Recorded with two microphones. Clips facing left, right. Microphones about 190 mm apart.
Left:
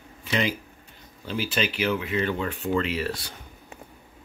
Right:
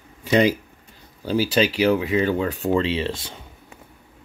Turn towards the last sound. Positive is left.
turn(degrees=-25)  # may be behind; listen again after turning